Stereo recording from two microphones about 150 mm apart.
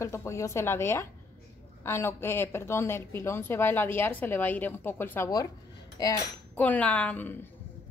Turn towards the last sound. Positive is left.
turn(degrees=10)  # may be behind; listen again after turning